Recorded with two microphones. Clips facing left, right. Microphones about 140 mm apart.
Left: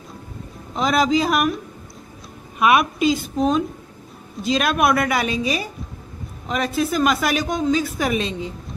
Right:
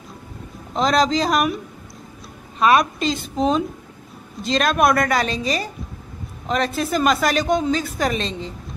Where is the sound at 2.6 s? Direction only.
10° left (ahead or behind).